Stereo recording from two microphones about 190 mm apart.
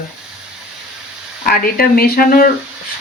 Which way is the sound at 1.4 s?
50° left (ahead or behind).